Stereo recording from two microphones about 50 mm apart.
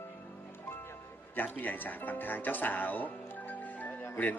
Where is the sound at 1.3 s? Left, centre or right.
Left.